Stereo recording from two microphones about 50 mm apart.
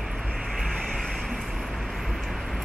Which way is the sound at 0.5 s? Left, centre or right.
Centre.